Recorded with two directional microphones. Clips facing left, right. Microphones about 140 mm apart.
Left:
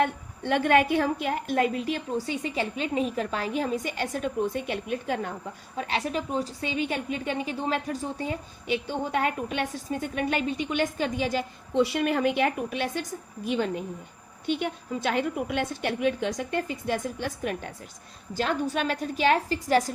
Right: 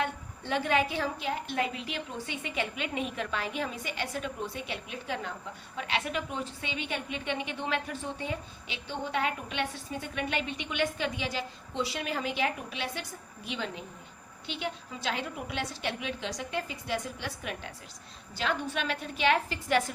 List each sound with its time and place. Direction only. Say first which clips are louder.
0.0 s a woman's voice: left 7 dB; 55° left (ahead or behind)
5.7 s a woman's voice: left 4 dB; 40° left (ahead or behind)